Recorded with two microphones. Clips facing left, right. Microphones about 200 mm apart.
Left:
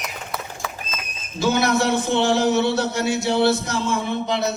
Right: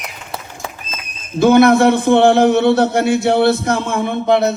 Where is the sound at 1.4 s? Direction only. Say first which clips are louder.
Right 10 dB; 55° right (ahead or behind).